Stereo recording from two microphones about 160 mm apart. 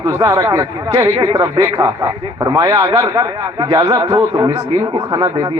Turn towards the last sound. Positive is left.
turn(degrees=-20)  # may be behind; listen again after turning